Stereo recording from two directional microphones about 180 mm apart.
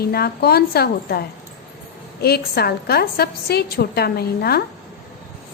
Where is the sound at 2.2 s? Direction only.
60° left (ahead or behind).